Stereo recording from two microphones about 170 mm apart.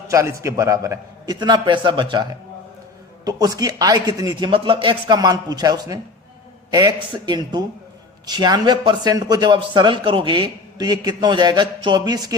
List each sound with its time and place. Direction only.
0.1 s speech: 20° right (ahead or behind)
3.2 s speech: 20° right (ahead or behind)